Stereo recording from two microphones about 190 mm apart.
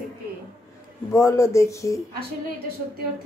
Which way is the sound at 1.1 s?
15° left (ahead or behind).